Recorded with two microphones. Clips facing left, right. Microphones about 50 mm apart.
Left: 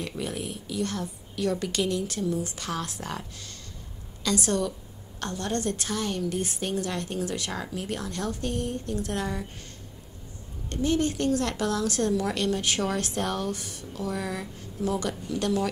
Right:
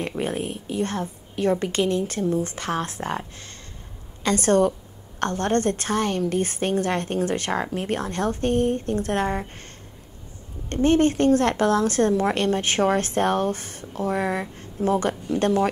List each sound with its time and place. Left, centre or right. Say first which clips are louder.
0.2 s a woman's voice: right 6 dB; right
10.7 s a woman's voice: right 7 dB; right